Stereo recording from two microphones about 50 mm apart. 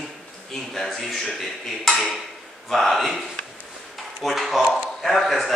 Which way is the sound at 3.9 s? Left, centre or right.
Centre.